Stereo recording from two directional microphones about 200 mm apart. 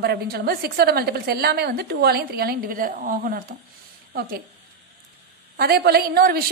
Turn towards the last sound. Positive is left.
turn(degrees=-50)  # may be behind; listen again after turning